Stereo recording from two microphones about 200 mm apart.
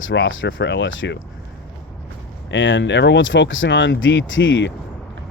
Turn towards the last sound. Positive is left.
turn(degrees=65)  # may be behind; listen again after turning